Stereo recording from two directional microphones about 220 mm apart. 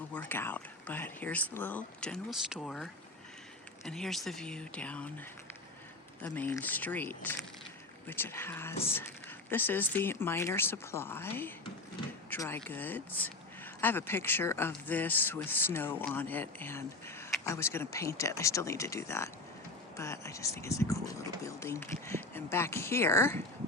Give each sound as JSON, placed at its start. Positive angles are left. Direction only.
{"t": 0.1, "sound": "speech", "side_deg": 10}
{"t": 6.2, "sound": "speech", "side_deg": 5}